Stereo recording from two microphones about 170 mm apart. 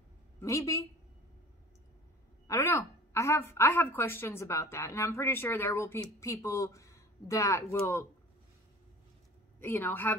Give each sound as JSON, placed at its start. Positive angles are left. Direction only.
{"t": 0.4, "sound": "a woman's voice", "side_deg": 15}
{"t": 2.4, "sound": "a woman's voice", "side_deg": 15}
{"t": 9.6, "sound": "a woman's voice", "side_deg": 15}